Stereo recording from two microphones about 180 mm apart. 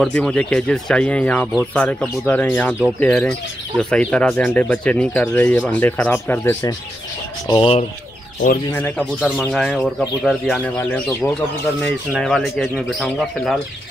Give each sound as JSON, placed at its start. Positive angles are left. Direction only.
{"t": 0.0, "sound": "speech", "side_deg": 5}
{"t": 7.4, "sound": "speech", "side_deg": 30}
{"t": 8.7, "sound": "speech", "side_deg": 10}
{"t": 9.2, "sound": "speech", "side_deg": 0}
{"t": 11.8, "sound": "speech", "side_deg": 5}